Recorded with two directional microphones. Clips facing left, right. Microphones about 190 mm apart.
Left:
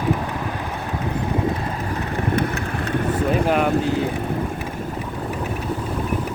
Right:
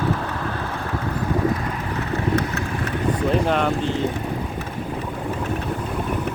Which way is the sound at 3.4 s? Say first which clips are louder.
Left 2 dB; 5° left (ahead or behind).